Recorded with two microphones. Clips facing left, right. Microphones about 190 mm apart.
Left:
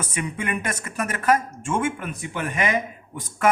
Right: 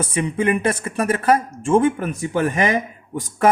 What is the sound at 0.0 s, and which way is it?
Speech, 30° right (ahead or behind).